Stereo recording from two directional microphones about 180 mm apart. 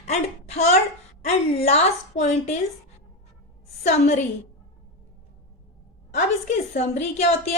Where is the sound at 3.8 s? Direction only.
40° left (ahead or behind).